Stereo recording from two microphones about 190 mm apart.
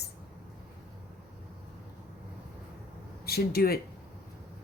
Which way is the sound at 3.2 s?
55° left (ahead or behind).